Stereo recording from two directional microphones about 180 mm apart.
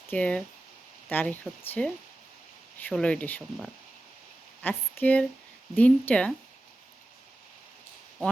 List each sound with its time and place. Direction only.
0.1 s speech: 5° left (ahead or behind)